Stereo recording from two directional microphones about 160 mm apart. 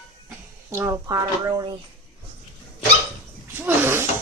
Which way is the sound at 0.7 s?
20° right (ahead or behind).